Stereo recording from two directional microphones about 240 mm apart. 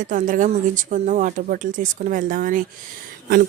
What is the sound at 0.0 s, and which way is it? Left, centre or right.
Speech, right.